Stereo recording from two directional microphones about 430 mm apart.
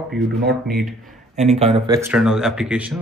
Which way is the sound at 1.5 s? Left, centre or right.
Centre.